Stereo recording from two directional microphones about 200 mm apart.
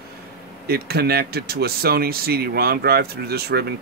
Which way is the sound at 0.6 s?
50° right (ahead or behind).